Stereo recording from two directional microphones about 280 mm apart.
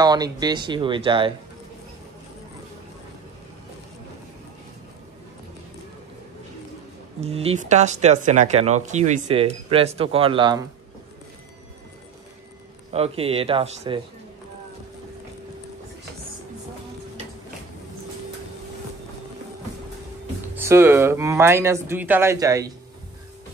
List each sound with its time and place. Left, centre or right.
0.0 s speech: centre
7.2 s speech: right
12.9 s speech: right
20.5 s speech: centre